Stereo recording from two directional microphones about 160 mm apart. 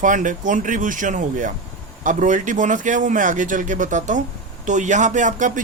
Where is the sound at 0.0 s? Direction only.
55° right (ahead or behind).